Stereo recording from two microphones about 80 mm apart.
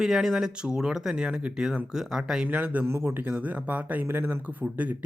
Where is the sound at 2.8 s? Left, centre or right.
Right.